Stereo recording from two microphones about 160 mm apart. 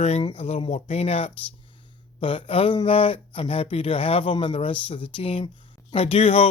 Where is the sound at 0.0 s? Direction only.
40° left (ahead or behind).